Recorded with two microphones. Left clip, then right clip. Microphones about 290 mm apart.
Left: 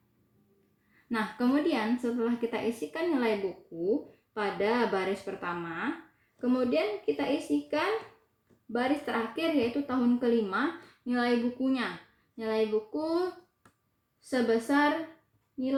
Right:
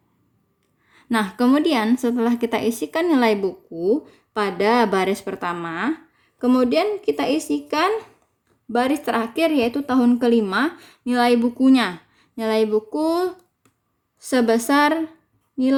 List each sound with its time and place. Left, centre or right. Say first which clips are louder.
1.1 s a woman's voice: right 10 dB; right
4.4 s a woman's voice: right 10 dB; right
8.7 s a woman's voice: right 9 dB; right